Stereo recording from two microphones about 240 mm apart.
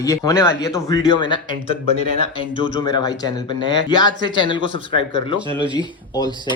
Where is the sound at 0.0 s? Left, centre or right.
Centre.